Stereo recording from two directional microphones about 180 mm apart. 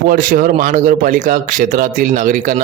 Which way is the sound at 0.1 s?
50° right (ahead or behind).